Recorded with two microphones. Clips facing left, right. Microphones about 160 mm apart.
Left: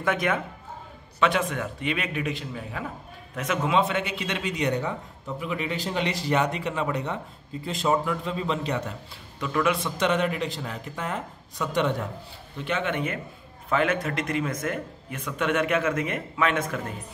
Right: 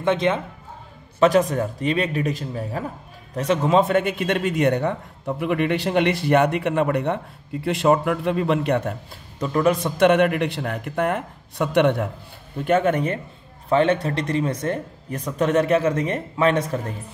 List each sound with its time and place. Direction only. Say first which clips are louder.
0.0 s speech: right 5 dB; 25° right (ahead or behind)
1.2 s a man's voice: right 7 dB; 40° right (ahead or behind); by 8.9 s 55° right (ahead or behind)
9.4 s a man's voice: right 5 dB; 40° right (ahead or behind); by 12.1 s 60° right (ahead or behind)
12.6 s speech: right 8 dB; 45° right (ahead or behind)